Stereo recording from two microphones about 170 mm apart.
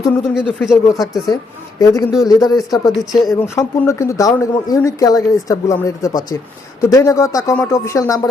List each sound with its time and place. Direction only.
0.0 s speech: 5° right (ahead or behind)
1.8 s speech: 20° left (ahead or behind)
2.9 s speech: centre (ahead or behind)
3.4 s speech: 15° left (ahead or behind)